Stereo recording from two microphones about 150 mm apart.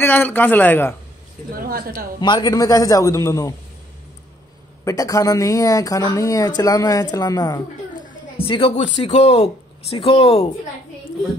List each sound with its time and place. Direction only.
0.0 s a man's voice: 15° left (ahead or behind)
2.1 s speech: 30° left (ahead or behind)
4.8 s speech: 25° left (ahead or behind); by 10.5 s 40° left (ahead or behind)